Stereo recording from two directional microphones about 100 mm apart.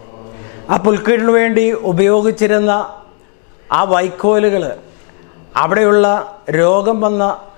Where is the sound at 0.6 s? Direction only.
15° left (ahead or behind).